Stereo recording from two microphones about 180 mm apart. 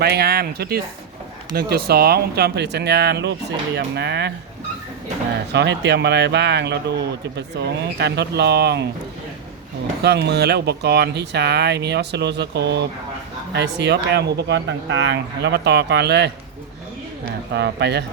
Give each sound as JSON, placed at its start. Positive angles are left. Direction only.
{"t": 0.0, "sound": "speech", "side_deg": -65}
{"t": 5.5, "sound": "speech", "side_deg": -70}
{"t": 10.0, "sound": "speech", "side_deg": -65}
{"t": 17.5, "sound": "speech", "side_deg": -70}